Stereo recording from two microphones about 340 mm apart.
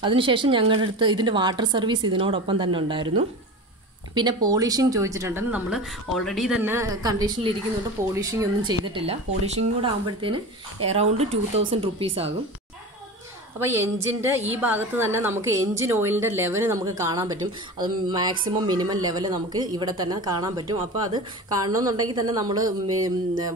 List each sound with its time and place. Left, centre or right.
0.0 s a woman's voice: centre
4.1 s a woman's voice: centre
13.6 s a woman's voice: centre